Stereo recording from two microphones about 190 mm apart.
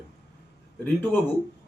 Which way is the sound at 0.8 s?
10° left (ahead or behind).